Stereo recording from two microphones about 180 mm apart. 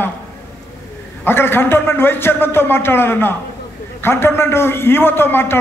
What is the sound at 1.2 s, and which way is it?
A man's voice, 10° left (ahead or behind).